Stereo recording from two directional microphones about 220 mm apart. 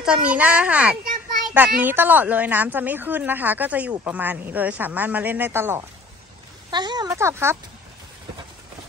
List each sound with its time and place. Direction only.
0.0 s a child's voice: 5° right (ahead or behind)
1.4 s child singing: 10° right (ahead or behind)
1.8 s a woman's voice: 10° right (ahead or behind)